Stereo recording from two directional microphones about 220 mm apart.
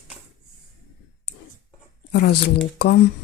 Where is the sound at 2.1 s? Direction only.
50° left (ahead or behind).